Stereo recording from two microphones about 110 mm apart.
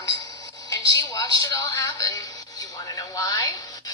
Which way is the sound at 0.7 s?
35° left (ahead or behind).